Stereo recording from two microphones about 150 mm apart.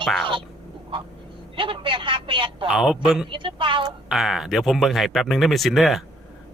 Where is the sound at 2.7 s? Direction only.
5° right (ahead or behind).